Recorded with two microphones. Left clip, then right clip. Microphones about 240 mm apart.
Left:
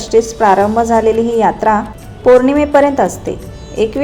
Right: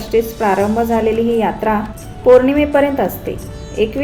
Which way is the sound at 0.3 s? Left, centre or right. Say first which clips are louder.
Left 5 dB; centre.